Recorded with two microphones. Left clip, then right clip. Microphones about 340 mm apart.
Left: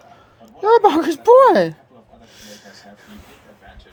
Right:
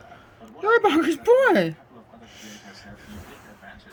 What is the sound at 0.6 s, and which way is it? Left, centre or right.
Speech, centre.